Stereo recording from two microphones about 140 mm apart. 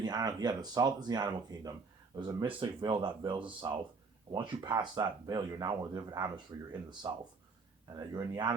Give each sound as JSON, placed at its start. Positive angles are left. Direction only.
{"t": 0.0, "sound": "speech", "side_deg": -30}